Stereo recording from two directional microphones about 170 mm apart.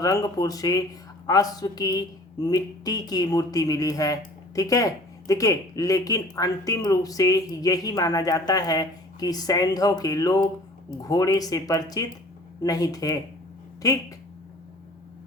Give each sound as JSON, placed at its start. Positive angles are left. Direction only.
{"t": 0.0, "sound": "speech", "side_deg": 20}